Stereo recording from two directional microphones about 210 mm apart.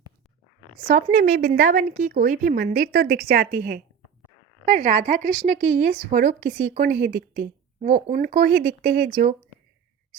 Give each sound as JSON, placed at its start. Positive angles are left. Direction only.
{"t": 0.9, "sound": "a woman's voice", "side_deg": -35}
{"t": 7.8, "sound": "a woman's voice", "side_deg": -30}